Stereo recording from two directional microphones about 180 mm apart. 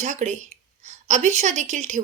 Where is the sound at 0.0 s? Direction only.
40° right (ahead or behind).